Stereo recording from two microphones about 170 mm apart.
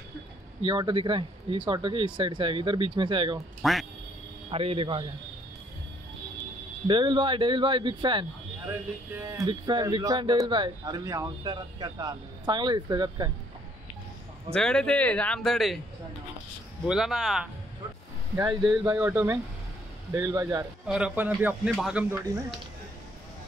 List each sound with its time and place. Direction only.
0.6 s speech: 30° right (ahead or behind)
3.6 s speech: centre (ahead or behind)
4.5 s a man's voice: 35° right (ahead or behind)
6.9 s speech: 30° right (ahead or behind)
9.1 s speech: 15° right (ahead or behind)
9.5 s speech: 25° right (ahead or behind)
14.5 s speech: 5° left (ahead or behind)
16.8 s speech: 5° right (ahead or behind)
18.3 s speech: 20° right (ahead or behind)
20.8 s speech: 5° right (ahead or behind)